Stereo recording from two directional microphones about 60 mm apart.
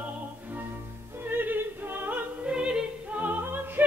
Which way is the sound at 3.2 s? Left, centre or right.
Right.